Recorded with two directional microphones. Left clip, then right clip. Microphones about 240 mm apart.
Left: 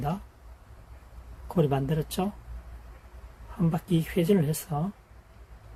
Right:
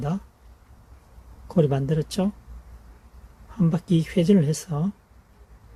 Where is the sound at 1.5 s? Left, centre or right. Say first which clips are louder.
Right 4 dB; right.